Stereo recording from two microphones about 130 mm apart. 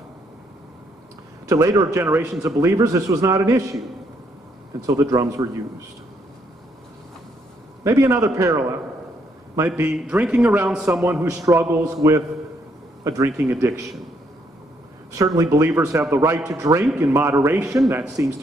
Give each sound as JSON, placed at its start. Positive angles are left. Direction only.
{"t": 1.5, "sound": "a man's voice", "side_deg": -25}
{"t": 4.8, "sound": "a man's voice", "side_deg": -25}
{"t": 7.8, "sound": "a man's voice", "side_deg": -25}
{"t": 9.8, "sound": "a man's voice", "side_deg": -5}
{"t": 11.1, "sound": "a man's voice", "side_deg": -20}
{"t": 15.1, "sound": "a man's voice", "side_deg": -25}